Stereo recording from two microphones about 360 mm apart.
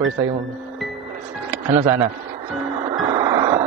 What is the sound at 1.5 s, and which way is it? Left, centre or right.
Speech, centre.